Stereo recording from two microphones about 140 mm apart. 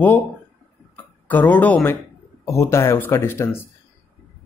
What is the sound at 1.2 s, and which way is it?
Speech, 10° left (ahead or behind).